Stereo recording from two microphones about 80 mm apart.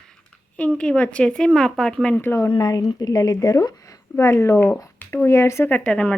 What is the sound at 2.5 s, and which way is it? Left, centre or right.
A woman's voice, left.